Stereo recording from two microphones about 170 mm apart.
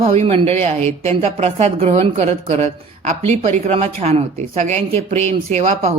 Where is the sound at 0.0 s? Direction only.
35° right (ahead or behind).